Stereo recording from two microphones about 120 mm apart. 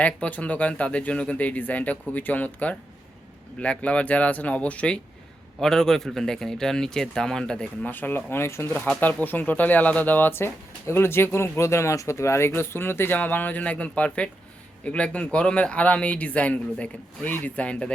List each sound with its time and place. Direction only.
0.0 s a man's voice: 10° left (ahead or behind)